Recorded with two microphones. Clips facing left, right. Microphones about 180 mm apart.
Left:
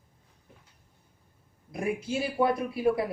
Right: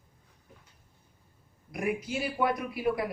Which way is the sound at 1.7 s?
25° left (ahead or behind).